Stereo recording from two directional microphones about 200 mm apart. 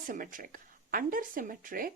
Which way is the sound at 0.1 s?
40° right (ahead or behind).